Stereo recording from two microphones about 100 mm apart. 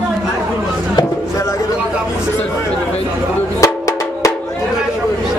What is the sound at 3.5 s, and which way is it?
Music, 35° left (ahead or behind).